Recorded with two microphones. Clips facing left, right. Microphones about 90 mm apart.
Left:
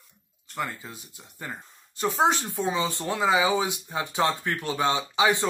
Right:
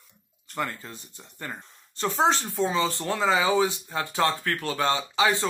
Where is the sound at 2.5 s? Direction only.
20° left (ahead or behind).